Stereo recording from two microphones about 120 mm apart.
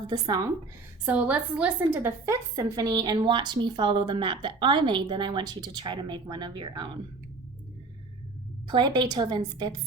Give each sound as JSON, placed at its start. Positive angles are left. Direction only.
{"t": 0.1, "sound": "a woman's voice", "side_deg": -40}
{"t": 1.0, "sound": "a woman's voice", "side_deg": -10}
{"t": 8.6, "sound": "a woman's voice", "side_deg": -40}